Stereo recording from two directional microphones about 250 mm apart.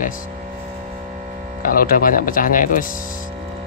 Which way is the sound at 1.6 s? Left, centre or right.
Left.